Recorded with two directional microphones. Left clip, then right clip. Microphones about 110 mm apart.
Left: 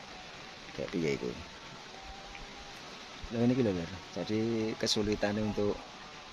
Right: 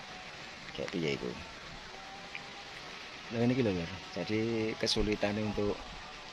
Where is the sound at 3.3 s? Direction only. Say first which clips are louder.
Left 1 dB; 20° left (ahead or behind).